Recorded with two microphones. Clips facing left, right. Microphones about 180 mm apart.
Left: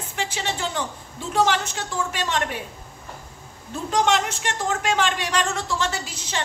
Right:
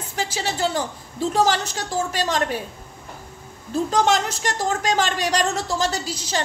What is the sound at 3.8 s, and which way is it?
A woman's voice, 35° right (ahead or behind).